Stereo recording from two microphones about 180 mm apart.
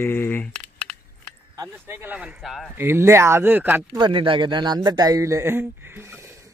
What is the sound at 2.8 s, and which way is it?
Speech, 15° right (ahead or behind).